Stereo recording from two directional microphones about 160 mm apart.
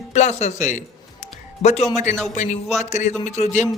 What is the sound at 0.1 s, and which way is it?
Speech, 45° left (ahead or behind).